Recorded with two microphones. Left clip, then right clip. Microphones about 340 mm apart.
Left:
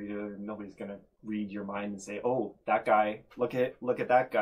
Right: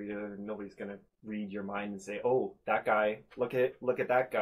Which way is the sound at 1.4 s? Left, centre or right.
Right.